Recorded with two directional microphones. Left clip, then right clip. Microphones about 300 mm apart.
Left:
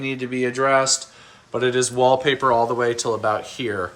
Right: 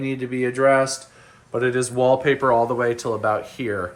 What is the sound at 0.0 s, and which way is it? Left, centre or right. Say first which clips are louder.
Speech: even; centre.